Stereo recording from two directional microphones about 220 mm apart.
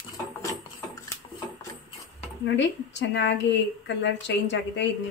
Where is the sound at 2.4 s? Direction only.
55° left (ahead or behind).